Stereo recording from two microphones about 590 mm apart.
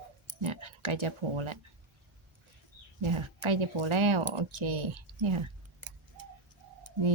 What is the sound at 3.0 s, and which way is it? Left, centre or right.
A woman's voice, right.